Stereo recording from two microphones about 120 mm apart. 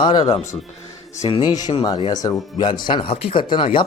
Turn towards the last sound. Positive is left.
turn(degrees=45)  # may be behind; listen again after turning